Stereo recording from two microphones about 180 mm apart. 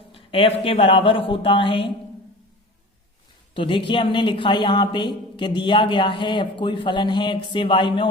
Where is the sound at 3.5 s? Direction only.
30° left (ahead or behind).